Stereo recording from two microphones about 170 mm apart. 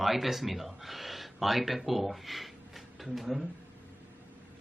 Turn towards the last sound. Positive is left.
turn(degrees=0)  # may be behind; listen again after turning